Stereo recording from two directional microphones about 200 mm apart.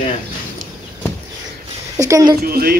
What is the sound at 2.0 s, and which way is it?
Speech, 15° right (ahead or behind).